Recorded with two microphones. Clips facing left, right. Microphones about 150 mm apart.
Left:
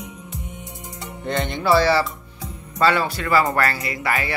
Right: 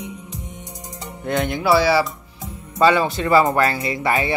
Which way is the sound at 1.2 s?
5° right (ahead or behind).